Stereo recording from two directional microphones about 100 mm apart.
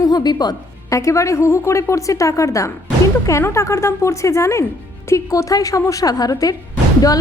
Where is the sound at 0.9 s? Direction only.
30° left (ahead or behind).